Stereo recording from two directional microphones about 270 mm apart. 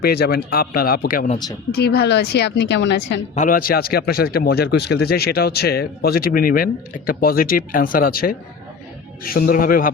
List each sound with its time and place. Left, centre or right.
0.0 s a man's voice: left
3.3 s a man's voice: left